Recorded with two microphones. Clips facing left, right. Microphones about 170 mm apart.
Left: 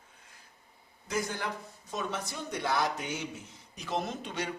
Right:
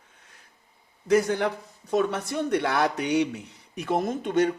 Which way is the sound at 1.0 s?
65° right (ahead or behind).